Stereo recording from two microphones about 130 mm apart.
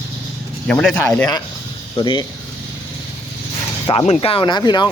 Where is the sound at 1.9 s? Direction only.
40° left (ahead or behind).